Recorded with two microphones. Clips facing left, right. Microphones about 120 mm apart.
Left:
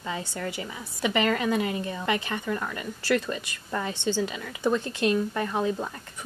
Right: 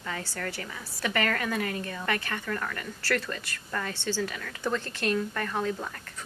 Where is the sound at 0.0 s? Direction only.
20° left (ahead or behind).